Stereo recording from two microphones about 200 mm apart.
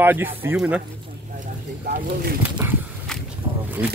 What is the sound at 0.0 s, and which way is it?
Speech, 10° right (ahead or behind).